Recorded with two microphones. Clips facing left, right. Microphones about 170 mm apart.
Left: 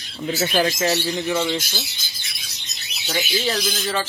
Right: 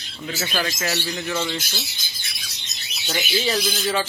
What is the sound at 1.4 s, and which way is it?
Speech, centre (ahead or behind).